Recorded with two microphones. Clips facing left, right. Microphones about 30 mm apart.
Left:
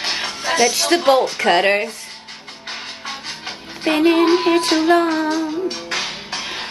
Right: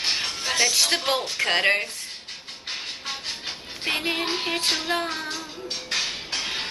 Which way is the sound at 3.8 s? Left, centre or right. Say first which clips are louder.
Left 11 dB; centre.